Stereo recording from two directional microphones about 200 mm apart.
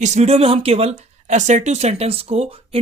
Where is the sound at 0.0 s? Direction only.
35° right (ahead or behind).